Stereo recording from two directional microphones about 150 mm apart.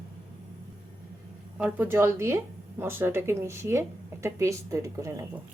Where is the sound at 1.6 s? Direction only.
15° right (ahead or behind).